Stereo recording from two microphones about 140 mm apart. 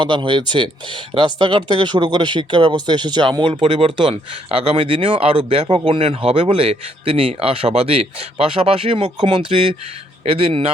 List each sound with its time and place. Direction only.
0.0 s a man's voice: 35° right (ahead or behind)